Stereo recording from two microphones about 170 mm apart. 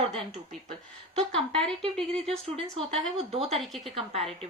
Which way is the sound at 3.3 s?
35° right (ahead or behind).